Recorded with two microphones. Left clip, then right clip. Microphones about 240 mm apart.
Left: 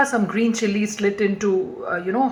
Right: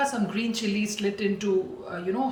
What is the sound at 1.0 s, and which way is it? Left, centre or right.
Speech, centre.